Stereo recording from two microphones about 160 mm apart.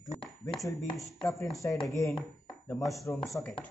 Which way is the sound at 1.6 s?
15° left (ahead or behind).